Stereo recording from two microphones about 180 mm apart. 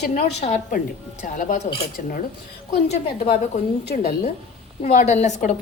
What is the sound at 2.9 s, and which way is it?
A woman's voice, 35° left (ahead or behind).